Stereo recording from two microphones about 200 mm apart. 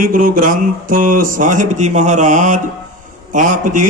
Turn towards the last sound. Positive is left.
turn(degrees=-40)  # may be behind; listen again after turning